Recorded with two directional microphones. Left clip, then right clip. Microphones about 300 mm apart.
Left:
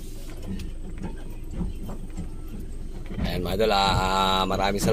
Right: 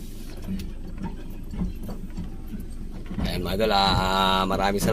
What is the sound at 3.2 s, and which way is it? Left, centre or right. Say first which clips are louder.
Speech: left 1 dB; centre.